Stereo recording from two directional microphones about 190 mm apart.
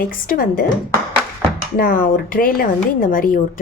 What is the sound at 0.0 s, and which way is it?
Speech, 50° left (ahead or behind).